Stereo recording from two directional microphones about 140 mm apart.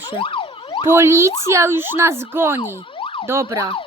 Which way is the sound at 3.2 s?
20° right (ahead or behind).